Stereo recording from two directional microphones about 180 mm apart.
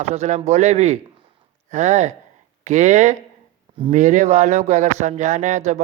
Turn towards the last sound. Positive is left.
turn(degrees=-40)  # may be behind; listen again after turning